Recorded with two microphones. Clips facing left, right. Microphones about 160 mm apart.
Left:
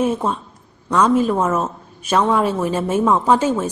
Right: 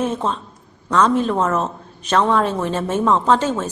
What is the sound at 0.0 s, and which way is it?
A woman's voice, 10° left (ahead or behind).